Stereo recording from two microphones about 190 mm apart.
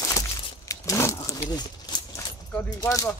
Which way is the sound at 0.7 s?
15° left (ahead or behind).